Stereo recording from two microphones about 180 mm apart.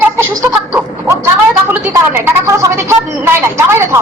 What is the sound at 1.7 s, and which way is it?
Speech, 15° right (ahead or behind).